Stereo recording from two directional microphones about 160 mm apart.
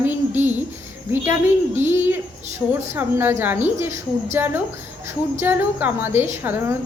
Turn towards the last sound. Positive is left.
turn(degrees=-15)  # may be behind; listen again after turning